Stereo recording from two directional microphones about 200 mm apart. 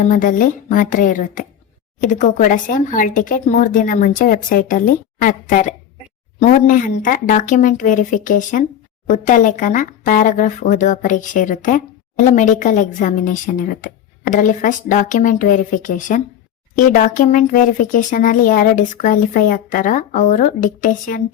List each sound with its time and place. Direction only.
0.0 s speech: 40° left (ahead or behind)